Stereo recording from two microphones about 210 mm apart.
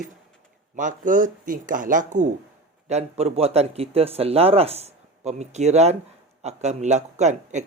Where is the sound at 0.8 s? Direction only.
40° right (ahead or behind).